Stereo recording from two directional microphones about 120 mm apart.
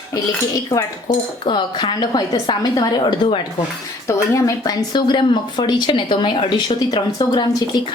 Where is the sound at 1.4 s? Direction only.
40° left (ahead or behind).